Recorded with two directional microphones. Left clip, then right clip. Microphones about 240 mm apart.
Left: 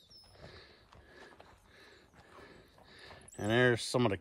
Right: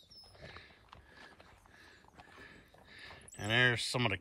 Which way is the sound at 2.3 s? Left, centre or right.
Centre.